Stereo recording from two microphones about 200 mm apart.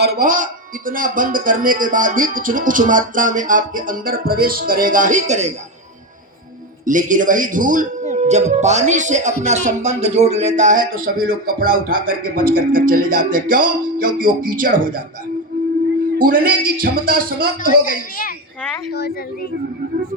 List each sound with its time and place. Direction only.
0.0 s speech: 50° right (ahead or behind)
6.8 s speech: 40° right (ahead or behind)
16.1 s speech: 45° right (ahead or behind)
17.7 s a woman's voice: 45° left (ahead or behind)